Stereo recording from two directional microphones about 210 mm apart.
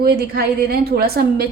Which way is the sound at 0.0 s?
45° right (ahead or behind).